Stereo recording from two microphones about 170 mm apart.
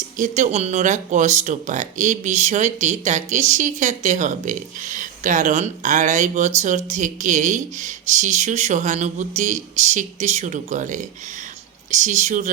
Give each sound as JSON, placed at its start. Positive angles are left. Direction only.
{"t": 0.2, "sound": "speech", "side_deg": -45}